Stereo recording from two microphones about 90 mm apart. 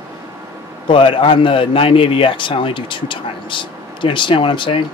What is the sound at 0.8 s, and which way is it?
A man's voice, 70° left (ahead or behind).